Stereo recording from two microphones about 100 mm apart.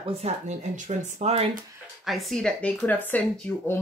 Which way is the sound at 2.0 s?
Centre (ahead or behind).